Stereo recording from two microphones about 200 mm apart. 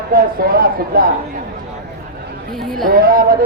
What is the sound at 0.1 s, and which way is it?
Speech, 45° right (ahead or behind).